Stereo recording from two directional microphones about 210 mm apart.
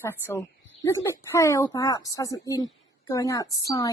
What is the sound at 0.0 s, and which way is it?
A woman's voice, 10° left (ahead or behind).